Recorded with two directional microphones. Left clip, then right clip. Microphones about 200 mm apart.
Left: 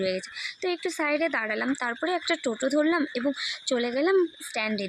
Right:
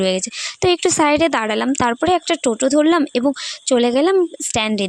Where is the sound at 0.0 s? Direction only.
55° right (ahead or behind).